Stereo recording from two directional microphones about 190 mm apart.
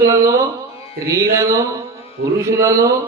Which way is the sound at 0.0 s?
15° right (ahead or behind).